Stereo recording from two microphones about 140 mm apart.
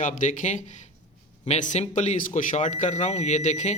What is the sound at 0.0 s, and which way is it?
Speech, 65° left (ahead or behind).